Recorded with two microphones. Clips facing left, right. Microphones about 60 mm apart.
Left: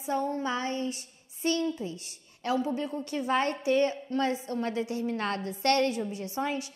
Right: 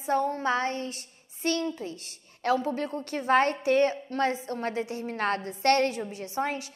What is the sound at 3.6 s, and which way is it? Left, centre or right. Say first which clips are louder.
Child singing: right 2 dB; right.